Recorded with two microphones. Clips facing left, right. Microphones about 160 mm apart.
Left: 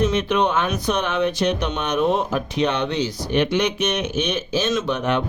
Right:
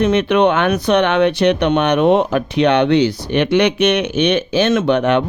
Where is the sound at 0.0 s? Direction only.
65° right (ahead or behind).